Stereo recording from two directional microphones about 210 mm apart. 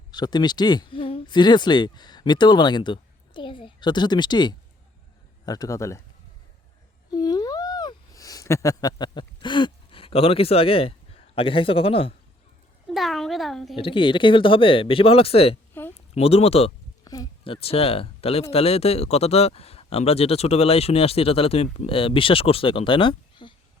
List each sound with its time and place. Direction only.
0.1 s speech: 20° left (ahead or behind)
7.1 s a sound: 20° left (ahead or behind)
12.9 s speech: centre (ahead or behind)
13.7 s speech: 25° left (ahead or behind)
15.8 s a sound: 10° left (ahead or behind)
16.1 s speech: 30° left (ahead or behind)
17.0 s speech: 15° left (ahead or behind)